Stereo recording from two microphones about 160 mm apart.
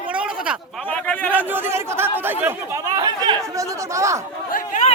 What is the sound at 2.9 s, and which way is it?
Speech, 25° right (ahead or behind).